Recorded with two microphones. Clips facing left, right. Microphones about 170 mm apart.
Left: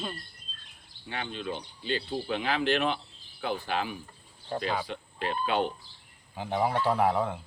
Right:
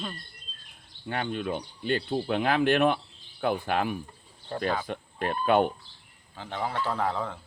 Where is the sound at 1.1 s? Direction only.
50° right (ahead or behind).